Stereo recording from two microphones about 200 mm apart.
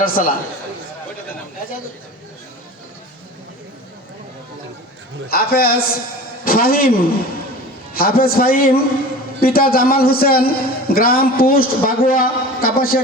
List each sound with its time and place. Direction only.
0.0 s a man's voice: 45° left (ahead or behind)
5.3 s a man's voice: 50° left (ahead or behind)
7.9 s a man's voice: 50° left (ahead or behind)